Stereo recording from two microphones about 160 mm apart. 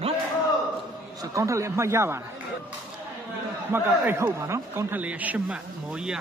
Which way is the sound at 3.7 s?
15° right (ahead or behind).